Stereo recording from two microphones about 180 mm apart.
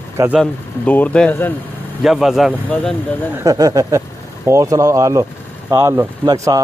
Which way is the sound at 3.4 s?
20° right (ahead or behind).